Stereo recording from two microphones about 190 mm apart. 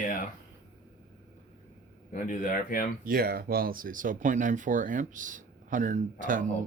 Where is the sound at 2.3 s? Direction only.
45° left (ahead or behind).